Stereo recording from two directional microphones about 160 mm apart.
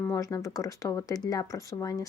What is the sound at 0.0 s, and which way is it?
Speech, 15° left (ahead or behind).